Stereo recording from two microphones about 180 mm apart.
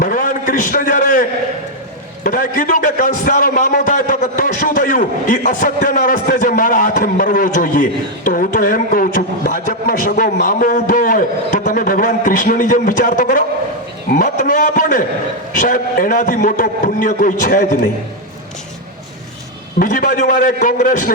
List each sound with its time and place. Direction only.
0.0 s a sound: 50° left (ahead or behind)
2.2 s a man's voice: 50° left (ahead or behind)
19.8 s a man's voice: 50° left (ahead or behind)